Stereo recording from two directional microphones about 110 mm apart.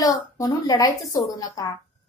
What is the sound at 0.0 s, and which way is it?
A woman's voice, 35° left (ahead or behind).